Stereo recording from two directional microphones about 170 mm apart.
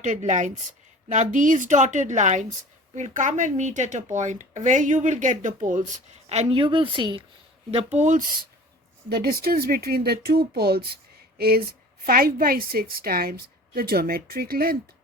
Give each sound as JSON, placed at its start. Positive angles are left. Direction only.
{"t": 0.0, "sound": "speech", "side_deg": -45}
{"t": 7.7, "sound": "speech", "side_deg": -40}
{"t": 9.0, "sound": "a woman's voice", "side_deg": -65}